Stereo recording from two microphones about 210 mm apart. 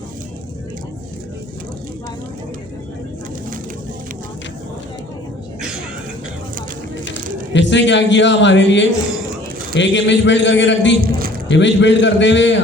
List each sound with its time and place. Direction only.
7.5 s a man's voice: 60° left (ahead or behind)
11.0 s a man's voice: 45° right (ahead or behind)
11.4 s a man's voice: 60° left (ahead or behind)